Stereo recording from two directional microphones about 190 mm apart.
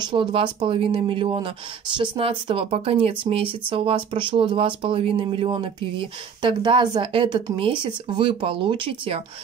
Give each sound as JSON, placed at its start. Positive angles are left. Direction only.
{"t": 0.0, "sound": "speech", "side_deg": -25}